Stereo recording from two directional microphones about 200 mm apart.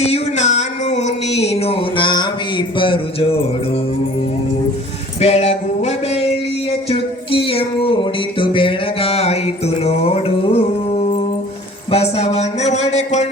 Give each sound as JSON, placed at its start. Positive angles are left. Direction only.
{"t": 0.0, "sound": "music", "side_deg": 35}
{"t": 5.2, "sound": "music", "side_deg": 30}
{"t": 11.9, "sound": "a sound", "side_deg": 30}